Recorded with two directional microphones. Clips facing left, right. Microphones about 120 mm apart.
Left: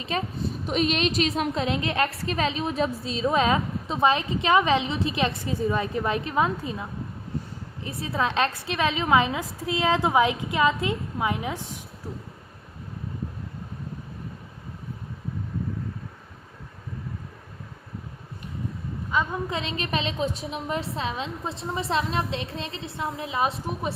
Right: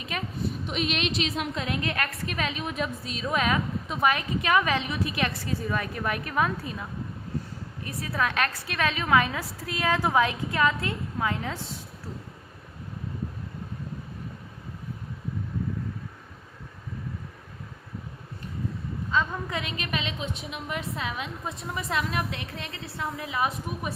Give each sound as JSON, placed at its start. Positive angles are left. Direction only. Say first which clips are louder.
{"t": 0.0, "sound": "a woman's voice", "louder": "left 3 dB", "side_deg": 30}
{"t": 1.5, "sound": "a woman's voice", "louder": "left 5 dB", "side_deg": 25}
{"t": 7.9, "sound": "a woman's voice", "louder": "left 2 dB", "side_deg": 25}
{"t": 19.1, "sound": "a woman's voice", "louder": "left 2 dB", "side_deg": 20}